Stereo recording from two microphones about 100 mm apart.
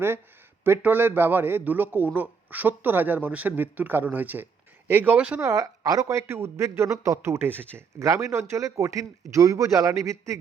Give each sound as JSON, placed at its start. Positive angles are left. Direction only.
{"t": 0.6, "sound": "a man's voice", "side_deg": -20}
{"t": 5.4, "sound": "speech", "side_deg": -35}